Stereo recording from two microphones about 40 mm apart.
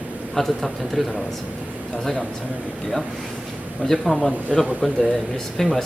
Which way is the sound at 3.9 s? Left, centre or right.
Centre.